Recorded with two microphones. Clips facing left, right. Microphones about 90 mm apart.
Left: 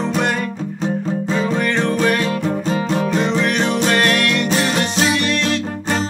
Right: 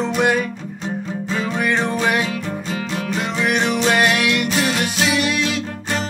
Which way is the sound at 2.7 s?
40° left (ahead or behind).